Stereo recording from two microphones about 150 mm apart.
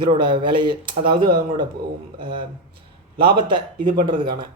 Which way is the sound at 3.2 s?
35° right (ahead or behind).